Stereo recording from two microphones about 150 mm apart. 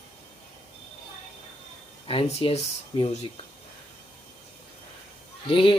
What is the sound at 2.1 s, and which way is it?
Speech, 40° left (ahead or behind).